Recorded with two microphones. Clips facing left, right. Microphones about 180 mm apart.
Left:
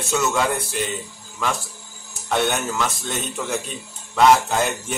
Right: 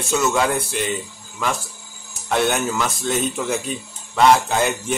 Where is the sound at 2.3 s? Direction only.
Centre (ahead or behind).